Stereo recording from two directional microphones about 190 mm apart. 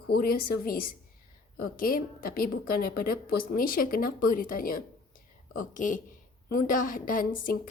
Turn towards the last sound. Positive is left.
turn(degrees=50)  # may be behind; listen again after turning